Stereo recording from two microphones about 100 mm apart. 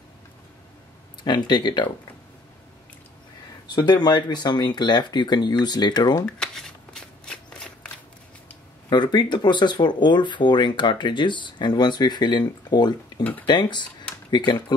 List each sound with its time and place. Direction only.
1.2 s speech: 45° left (ahead or behind)
3.6 s speech: 45° left (ahead or behind)
6.2 s shuffling cards: 5° left (ahead or behind)
8.9 s speech: 50° left (ahead or behind)